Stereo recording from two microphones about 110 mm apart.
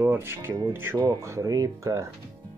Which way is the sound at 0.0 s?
20° right (ahead or behind).